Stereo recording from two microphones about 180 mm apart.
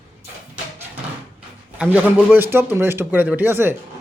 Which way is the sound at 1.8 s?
10° right (ahead or behind).